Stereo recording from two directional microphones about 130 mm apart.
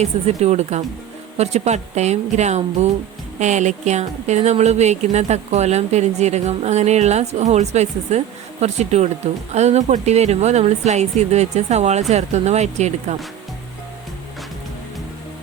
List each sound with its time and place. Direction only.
0.0 s speech: 55° right (ahead or behind)